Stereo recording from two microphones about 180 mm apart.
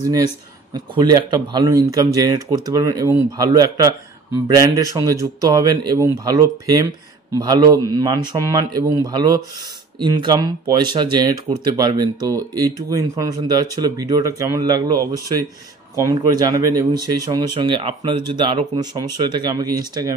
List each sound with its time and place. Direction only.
0.7 s speech: 25° right (ahead or behind)
4.9 s speech: 20° right (ahead or behind)